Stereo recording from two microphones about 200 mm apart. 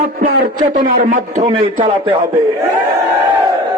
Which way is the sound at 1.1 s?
35° right (ahead or behind).